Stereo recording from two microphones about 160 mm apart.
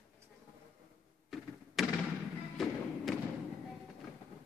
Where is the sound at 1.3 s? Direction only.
Centre (ahead or behind).